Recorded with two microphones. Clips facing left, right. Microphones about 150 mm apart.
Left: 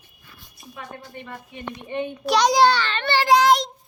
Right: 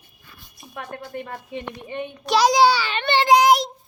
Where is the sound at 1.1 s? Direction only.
65° right (ahead or behind).